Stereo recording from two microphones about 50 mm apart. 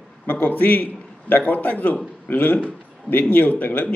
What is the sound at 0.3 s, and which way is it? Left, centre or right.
A man's voice, left.